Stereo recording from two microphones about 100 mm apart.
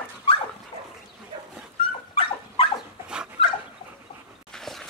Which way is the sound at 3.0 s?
10° right (ahead or behind).